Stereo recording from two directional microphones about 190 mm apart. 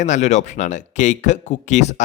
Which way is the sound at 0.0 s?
40° left (ahead or behind).